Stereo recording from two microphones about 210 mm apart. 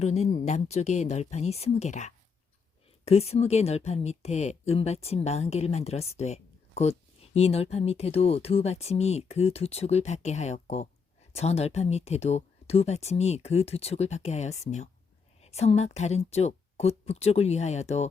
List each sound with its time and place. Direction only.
0.0 s speech: 30° left (ahead or behind)